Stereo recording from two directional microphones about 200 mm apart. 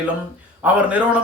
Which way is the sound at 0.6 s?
5° right (ahead or behind).